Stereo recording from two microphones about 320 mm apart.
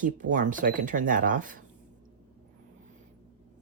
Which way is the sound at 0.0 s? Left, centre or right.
Right.